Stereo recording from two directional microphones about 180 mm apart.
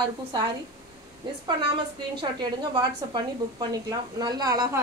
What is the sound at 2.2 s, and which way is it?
A woman's voice, 25° right (ahead or behind).